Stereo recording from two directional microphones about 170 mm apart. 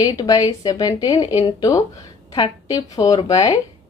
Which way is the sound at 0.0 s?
25° left (ahead or behind).